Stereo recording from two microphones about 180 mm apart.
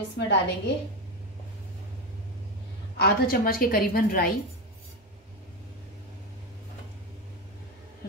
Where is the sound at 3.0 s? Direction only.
55° left (ahead or behind).